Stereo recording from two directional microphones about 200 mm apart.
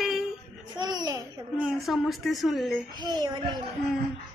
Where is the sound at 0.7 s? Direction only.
20° right (ahead or behind).